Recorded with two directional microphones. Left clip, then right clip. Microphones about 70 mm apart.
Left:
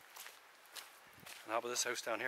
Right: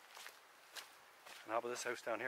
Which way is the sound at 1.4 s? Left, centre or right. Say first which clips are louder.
Left 2 dB; left.